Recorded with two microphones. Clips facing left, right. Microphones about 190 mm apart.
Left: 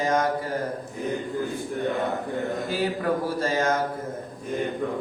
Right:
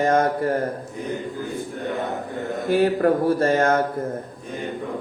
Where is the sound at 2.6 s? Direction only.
55° right (ahead or behind).